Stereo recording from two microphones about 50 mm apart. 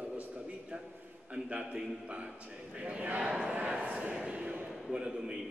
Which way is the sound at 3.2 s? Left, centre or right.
Right.